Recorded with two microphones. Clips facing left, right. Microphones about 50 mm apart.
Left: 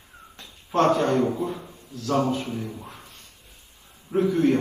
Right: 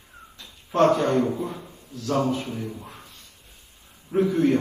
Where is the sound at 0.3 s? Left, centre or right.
Left.